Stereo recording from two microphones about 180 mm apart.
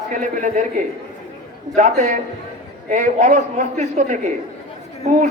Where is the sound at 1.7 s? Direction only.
45° right (ahead or behind).